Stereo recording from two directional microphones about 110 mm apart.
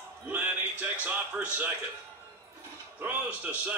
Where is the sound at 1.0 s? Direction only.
15° right (ahead or behind).